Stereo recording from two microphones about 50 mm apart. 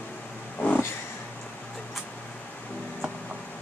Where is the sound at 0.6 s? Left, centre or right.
Left.